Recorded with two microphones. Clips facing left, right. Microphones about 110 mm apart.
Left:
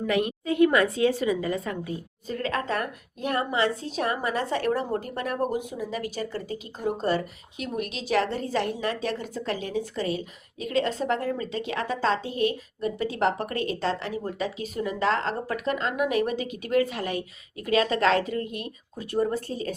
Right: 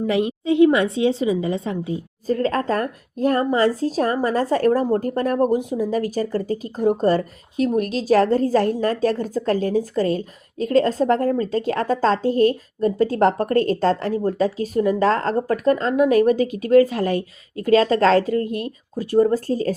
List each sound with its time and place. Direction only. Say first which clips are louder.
0.0 s a woman's voice: right 5 dB; 30° right (ahead or behind)
2.2 s a woman's voice: right 8 dB; 40° right (ahead or behind)